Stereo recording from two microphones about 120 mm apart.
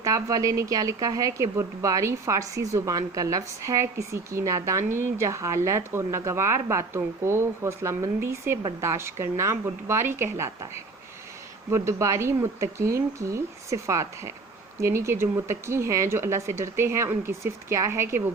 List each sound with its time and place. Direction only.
0.0 s speech: 30° right (ahead or behind)
11.7 s speech: 25° right (ahead or behind)